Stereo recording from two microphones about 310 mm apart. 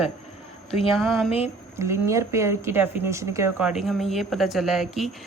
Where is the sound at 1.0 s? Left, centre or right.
Centre.